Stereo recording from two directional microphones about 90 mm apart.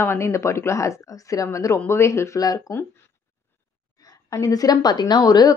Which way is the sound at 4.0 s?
40° left (ahead or behind).